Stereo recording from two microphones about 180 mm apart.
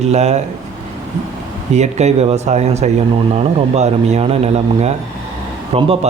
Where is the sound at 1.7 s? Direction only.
40° right (ahead or behind).